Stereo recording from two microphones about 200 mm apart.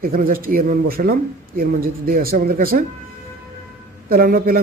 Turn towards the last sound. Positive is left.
turn(degrees=-45)  # may be behind; listen again after turning